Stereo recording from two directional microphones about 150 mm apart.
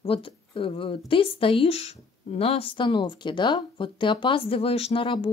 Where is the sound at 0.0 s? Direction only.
35° left (ahead or behind).